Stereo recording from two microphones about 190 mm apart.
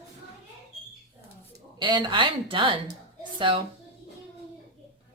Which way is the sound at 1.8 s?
25° right (ahead or behind).